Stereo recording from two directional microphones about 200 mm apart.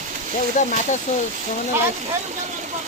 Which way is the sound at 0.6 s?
40° left (ahead or behind).